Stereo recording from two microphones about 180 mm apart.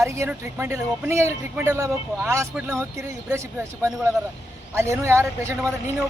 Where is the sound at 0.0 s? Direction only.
10° right (ahead or behind).